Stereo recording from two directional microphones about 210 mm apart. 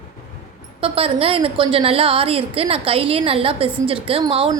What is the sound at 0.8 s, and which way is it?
A woman's voice, 25° right (ahead or behind).